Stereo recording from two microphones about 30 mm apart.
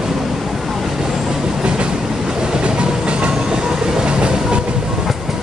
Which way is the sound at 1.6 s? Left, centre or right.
Right.